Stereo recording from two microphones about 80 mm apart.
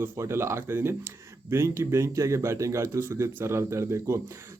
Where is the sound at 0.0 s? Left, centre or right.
Right.